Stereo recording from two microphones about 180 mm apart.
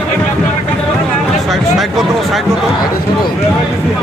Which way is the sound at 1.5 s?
Centre (ahead or behind).